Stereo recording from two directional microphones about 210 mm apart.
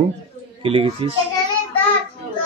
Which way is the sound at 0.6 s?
25° right (ahead or behind).